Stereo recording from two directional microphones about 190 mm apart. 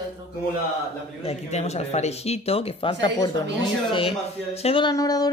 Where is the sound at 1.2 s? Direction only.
35° left (ahead or behind).